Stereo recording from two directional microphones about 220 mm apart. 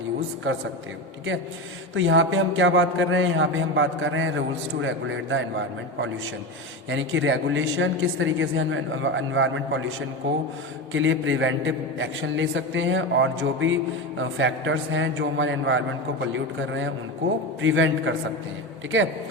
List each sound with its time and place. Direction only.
2.0 s a man's voice: 60° right (ahead or behind)
10.9 s a man's voice: 60° right (ahead or behind)
17.6 s a man's voice: 60° right (ahead or behind)